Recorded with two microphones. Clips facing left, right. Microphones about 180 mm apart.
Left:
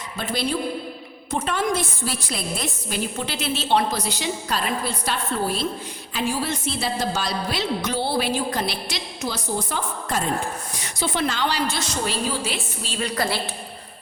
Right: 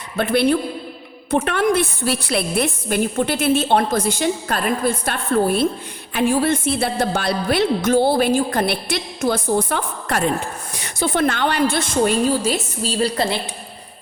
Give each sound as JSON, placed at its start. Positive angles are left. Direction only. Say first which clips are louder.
{"t": 0.2, "sound": "a woman's voice", "louder": "right 8 dB", "side_deg": -60}
{"t": 10.8, "sound": "a woman's voice", "louder": "right 6 dB", "side_deg": -55}